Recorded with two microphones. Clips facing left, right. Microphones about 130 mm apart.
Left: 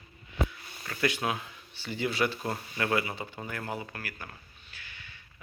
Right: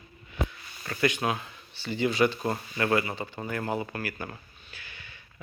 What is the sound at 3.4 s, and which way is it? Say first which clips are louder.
Speech: right 8 dB; 10° right (ahead or behind).